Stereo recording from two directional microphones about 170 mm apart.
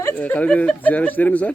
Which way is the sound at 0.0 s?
10° left (ahead or behind).